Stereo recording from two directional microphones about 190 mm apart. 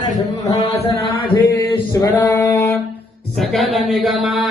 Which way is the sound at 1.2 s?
25° left (ahead or behind).